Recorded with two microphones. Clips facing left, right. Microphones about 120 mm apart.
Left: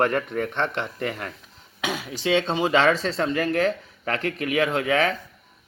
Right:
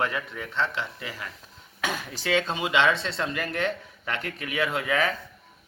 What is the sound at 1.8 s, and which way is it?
A man's voice, 15° left (ahead or behind).